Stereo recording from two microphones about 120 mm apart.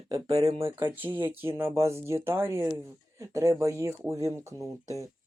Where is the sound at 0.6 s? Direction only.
20° right (ahead or behind).